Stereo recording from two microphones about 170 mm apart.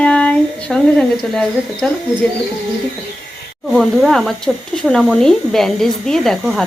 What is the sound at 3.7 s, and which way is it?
Speech, centre (ahead or behind).